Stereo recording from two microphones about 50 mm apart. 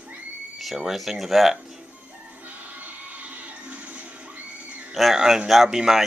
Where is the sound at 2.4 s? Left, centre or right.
Right.